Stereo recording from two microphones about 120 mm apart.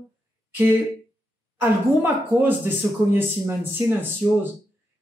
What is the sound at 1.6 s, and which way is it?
Speech, 15° right (ahead or behind).